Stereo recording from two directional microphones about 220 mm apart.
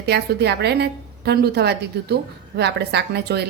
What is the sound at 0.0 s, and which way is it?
A woman's voice, 50° right (ahead or behind).